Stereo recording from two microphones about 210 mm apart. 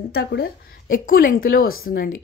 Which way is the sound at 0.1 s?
50° left (ahead or behind).